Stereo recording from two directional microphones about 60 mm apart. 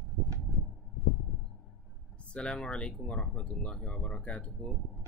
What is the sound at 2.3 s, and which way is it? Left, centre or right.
Speech, centre.